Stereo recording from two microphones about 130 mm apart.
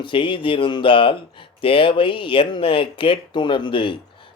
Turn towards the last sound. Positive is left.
turn(degrees=40)  # may be behind; listen again after turning